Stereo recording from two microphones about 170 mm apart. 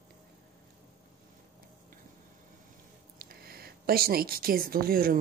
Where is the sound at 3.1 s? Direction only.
60° right (ahead or behind).